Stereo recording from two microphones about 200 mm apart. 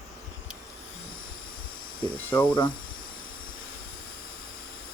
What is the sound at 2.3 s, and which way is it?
Speech, 25° left (ahead or behind).